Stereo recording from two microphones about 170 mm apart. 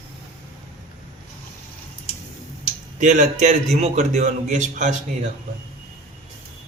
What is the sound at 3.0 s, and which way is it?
A man's voice, 45° right (ahead or behind).